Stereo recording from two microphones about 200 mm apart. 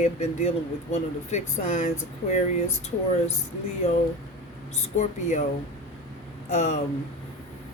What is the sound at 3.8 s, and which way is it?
Speech, 30° left (ahead or behind).